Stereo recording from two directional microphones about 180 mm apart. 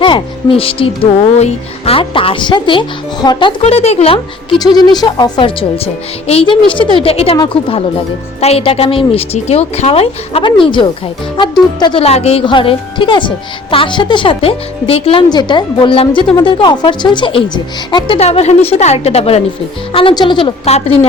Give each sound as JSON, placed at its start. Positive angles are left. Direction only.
{"t": 0.0, "sound": "a woman's voice", "side_deg": 25}